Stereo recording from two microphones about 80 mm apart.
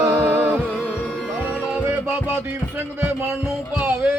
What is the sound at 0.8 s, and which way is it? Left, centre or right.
Music, left.